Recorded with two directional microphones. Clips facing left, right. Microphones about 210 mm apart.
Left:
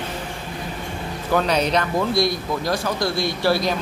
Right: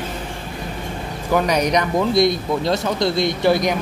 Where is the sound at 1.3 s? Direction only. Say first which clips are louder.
Right 2 dB; 10° right (ahead or behind).